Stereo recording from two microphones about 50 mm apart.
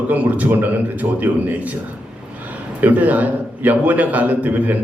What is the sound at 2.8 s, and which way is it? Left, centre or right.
A man's voice, right.